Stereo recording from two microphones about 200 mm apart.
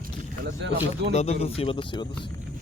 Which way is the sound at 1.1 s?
35° left (ahead or behind).